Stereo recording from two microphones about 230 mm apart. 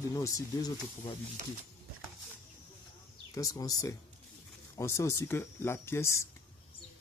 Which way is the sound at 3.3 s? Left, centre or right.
Centre.